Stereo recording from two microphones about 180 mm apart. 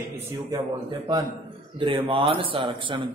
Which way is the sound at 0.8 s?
25° right (ahead or behind).